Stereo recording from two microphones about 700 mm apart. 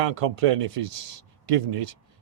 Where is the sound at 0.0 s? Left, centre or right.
Right.